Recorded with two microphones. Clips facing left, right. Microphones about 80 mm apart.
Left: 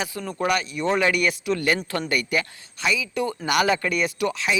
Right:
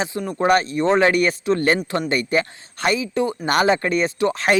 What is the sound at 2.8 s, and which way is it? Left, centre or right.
Speech, right.